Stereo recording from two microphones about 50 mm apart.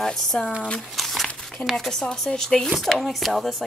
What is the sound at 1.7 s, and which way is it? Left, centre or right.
Speech, centre.